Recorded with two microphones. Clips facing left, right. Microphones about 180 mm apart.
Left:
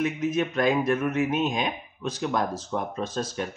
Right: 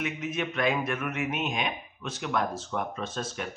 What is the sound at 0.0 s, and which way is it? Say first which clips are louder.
Speech: left 6 dB; 40° left (ahead or behind).